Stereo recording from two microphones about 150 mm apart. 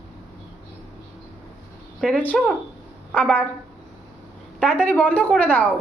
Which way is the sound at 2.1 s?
10° left (ahead or behind).